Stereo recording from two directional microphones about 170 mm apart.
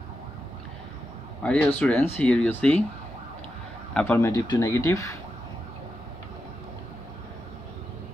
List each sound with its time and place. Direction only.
1.4 s speech: 5° left (ahead or behind)
3.9 s speech: 10° left (ahead or behind)